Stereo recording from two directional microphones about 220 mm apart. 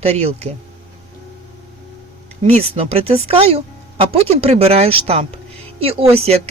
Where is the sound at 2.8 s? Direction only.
25° right (ahead or behind).